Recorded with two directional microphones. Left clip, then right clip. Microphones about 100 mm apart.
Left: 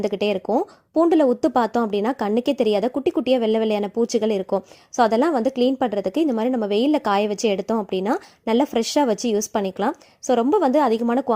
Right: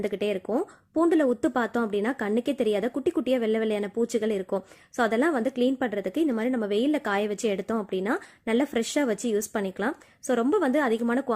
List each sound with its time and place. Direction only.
0.0 s a woman's voice: 50° left (ahead or behind)
3.0 s a woman's voice: 30° left (ahead or behind)
3.2 s a woman's voice: 45° left (ahead or behind)
6.7 s speech: 45° left (ahead or behind)
10.5 s a woman's voice: 35° left (ahead or behind)